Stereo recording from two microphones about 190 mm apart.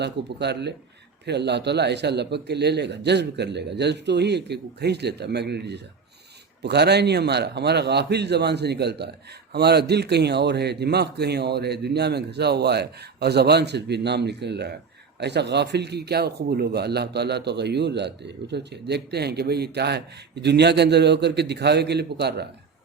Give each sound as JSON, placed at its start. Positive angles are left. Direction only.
{"t": 0.0, "sound": "a man's voice", "side_deg": -60}